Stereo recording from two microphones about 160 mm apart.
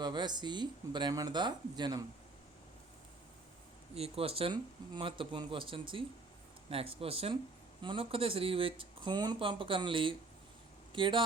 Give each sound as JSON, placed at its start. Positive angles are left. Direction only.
{"t": 0.0, "sound": "speech", "side_deg": -25}
{"t": 3.9, "sound": "speech", "side_deg": -40}